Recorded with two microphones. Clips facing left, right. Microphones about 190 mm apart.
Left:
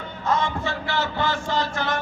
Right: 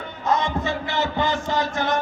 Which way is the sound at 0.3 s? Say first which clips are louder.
Right 2 dB; 20° right (ahead or behind).